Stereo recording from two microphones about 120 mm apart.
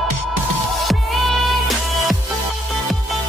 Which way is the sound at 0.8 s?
Centre (ahead or behind).